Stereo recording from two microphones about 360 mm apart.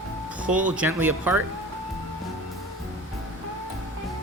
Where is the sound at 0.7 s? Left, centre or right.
Centre.